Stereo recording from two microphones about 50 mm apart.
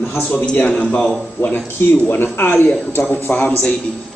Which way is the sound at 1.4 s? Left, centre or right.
Left.